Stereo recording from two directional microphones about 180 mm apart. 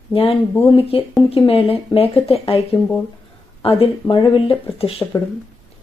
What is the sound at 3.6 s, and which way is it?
Speech, 30° left (ahead or behind).